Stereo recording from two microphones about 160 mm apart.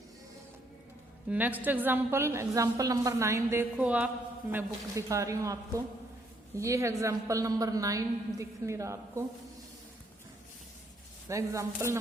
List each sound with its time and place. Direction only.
1.3 s a woman's voice: 10° right (ahead or behind)
4.5 s a woman's voice: 20° right (ahead or behind)
11.3 s a woman's voice: 20° right (ahead or behind)